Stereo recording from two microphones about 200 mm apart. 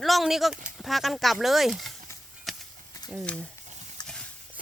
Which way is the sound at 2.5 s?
Centre (ahead or behind).